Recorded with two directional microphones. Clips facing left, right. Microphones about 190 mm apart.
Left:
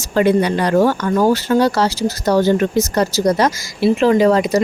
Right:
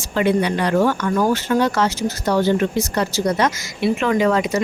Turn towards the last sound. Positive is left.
turn(degrees=35)  # may be behind; listen again after turning